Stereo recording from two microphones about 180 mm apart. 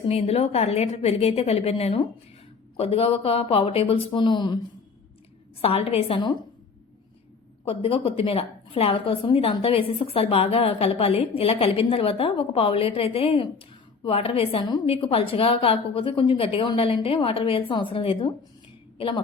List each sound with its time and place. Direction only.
0.1 s a woman's voice: 35° left (ahead or behind)
5.6 s a woman's voice: 35° left (ahead or behind)
7.6 s a woman's voice: 30° left (ahead or behind)